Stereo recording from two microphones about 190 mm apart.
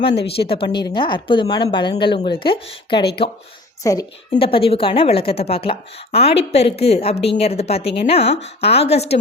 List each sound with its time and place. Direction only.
0.1 s speech: 60° left (ahead or behind)
0.3 s speech: 30° left (ahead or behind)
3.9 s a woman's voice: 15° left (ahead or behind)
4.4 s a woman's voice: 30° left (ahead or behind)